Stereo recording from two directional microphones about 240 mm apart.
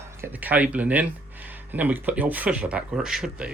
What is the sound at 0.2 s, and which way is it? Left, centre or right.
Speech, centre.